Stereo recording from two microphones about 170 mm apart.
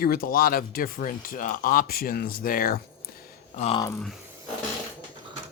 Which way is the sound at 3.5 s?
40° left (ahead or behind).